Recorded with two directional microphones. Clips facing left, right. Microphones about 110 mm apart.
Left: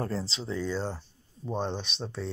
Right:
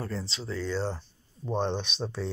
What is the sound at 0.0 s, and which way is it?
Speech, 30° left (ahead or behind).